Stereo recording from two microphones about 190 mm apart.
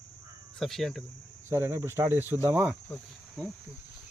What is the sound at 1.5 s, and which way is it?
Speech, 15° right (ahead or behind).